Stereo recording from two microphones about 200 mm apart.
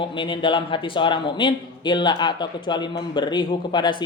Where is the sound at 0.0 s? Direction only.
25° left (ahead or behind).